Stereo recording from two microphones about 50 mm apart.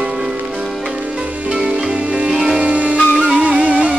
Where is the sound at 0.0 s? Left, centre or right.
Centre.